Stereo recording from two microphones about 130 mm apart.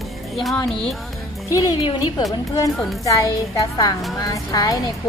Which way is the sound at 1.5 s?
30° left (ahead or behind).